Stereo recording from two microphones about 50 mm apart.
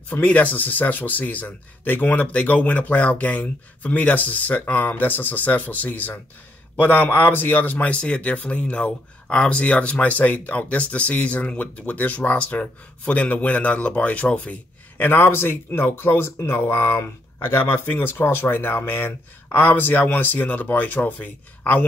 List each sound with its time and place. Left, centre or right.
0.1 s speech: left
15.0 s speech: left